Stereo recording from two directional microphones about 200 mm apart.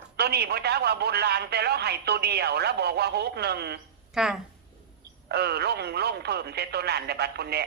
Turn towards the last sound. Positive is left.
turn(degrees=-55)  # may be behind; listen again after turning